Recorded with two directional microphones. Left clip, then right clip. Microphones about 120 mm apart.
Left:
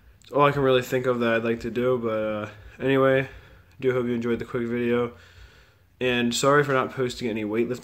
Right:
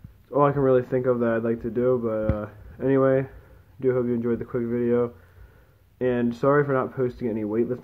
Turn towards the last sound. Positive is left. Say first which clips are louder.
# right 1 dB
turn(degrees=30)  # may be behind; listen again after turning